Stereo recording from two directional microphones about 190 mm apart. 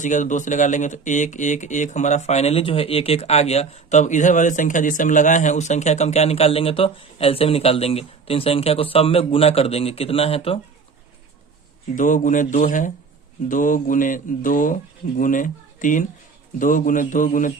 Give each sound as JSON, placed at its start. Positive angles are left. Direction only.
{"t": 0.0, "sound": "speech", "side_deg": 40}
{"t": 11.9, "sound": "speech", "side_deg": 45}